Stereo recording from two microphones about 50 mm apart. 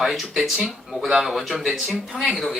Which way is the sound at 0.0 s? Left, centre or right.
Centre.